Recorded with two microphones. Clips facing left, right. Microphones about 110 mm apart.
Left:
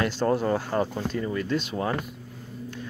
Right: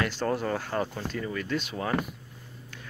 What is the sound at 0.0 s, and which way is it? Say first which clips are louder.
Speech: left 4 dB; 25° left (ahead or behind).